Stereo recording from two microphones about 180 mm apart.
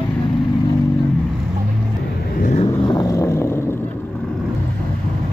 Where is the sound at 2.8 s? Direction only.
20° left (ahead or behind).